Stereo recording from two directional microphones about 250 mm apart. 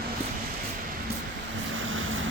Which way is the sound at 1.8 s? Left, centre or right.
Right.